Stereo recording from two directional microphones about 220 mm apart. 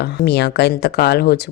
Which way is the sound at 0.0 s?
50° left (ahead or behind).